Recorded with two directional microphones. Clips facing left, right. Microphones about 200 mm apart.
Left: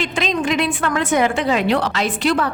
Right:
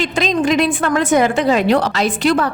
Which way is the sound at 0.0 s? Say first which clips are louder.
Right 4 dB; 40° right (ahead or behind).